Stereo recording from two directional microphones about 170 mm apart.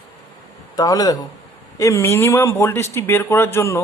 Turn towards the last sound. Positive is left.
turn(degrees=15)  # may be behind; listen again after turning